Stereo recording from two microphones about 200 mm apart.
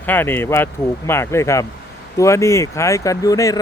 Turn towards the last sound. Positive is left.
turn(degrees=15)  # may be behind; listen again after turning